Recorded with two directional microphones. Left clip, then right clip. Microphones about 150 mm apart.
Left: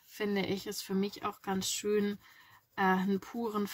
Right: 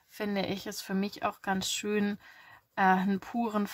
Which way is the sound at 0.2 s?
35° right (ahead or behind).